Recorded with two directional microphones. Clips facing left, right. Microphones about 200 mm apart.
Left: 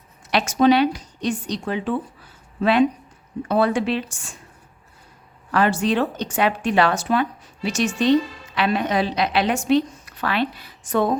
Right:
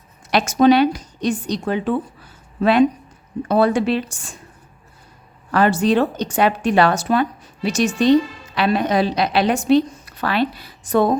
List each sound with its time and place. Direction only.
0.3 s a woman's voice: 45° right (ahead or behind)
5.5 s a woman's voice: 40° right (ahead or behind)